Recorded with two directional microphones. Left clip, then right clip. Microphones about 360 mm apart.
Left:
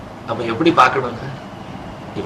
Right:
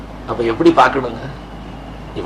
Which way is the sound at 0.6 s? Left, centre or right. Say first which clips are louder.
Right 4 dB; right.